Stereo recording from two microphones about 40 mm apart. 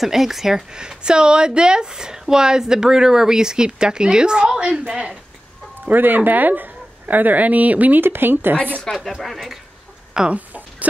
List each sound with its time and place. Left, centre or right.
0.0 s a woman's voice: centre; by 5.1 s right
5.9 s speech: right
8.0 s speech: right
8.9 s speech: centre
9.2 s speech: centre
10.3 s a sound: right